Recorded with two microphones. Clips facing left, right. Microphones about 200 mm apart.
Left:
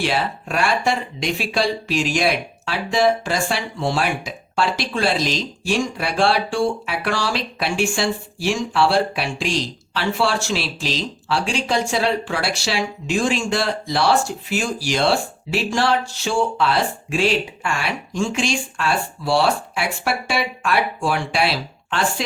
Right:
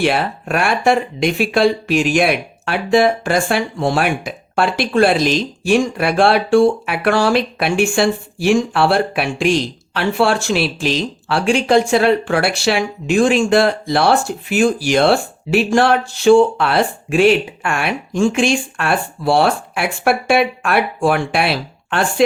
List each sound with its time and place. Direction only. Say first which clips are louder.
0.0 s speech: right 5 dB; 60° right (ahead or behind)